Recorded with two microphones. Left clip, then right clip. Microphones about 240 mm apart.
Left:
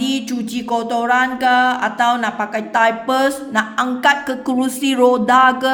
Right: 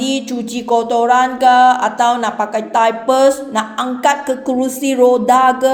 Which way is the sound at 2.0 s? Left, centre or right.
Centre.